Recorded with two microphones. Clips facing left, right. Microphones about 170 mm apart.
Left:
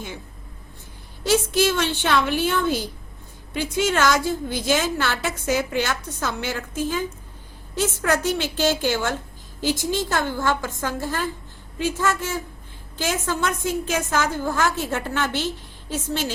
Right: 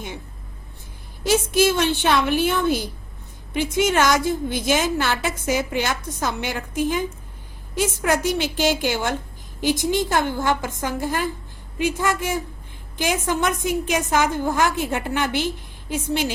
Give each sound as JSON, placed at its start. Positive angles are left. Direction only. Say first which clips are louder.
{"t": 1.3, "sound": "a woman's voice", "louder": "right 1 dB", "side_deg": -15}